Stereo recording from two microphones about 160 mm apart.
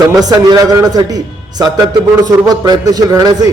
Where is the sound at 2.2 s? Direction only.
25° right (ahead or behind).